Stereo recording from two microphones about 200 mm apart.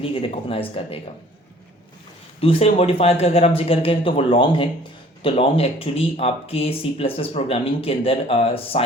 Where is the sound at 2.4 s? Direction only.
30° left (ahead or behind).